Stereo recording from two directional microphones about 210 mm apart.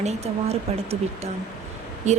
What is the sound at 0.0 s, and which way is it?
Music, 30° right (ahead or behind).